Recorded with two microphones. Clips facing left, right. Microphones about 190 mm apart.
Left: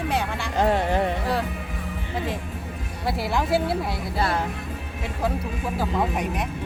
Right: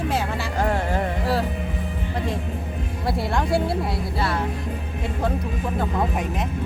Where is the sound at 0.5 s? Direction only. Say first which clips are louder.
Left 3 dB; 20° left (ahead or behind).